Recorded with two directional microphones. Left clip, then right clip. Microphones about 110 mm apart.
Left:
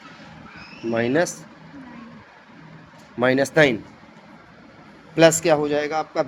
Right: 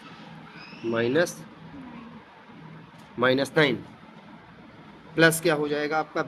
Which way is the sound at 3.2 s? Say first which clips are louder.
Left 5 dB; 90° left.